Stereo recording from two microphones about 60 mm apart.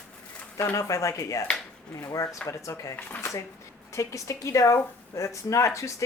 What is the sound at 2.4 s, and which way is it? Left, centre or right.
Speech, left.